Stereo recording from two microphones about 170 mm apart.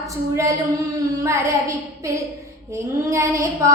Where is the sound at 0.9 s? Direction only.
20° right (ahead or behind).